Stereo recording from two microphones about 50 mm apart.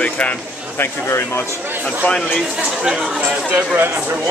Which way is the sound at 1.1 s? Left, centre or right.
Left.